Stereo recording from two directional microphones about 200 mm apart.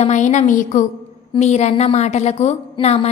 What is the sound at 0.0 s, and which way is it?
A woman's voice, 40° left (ahead or behind).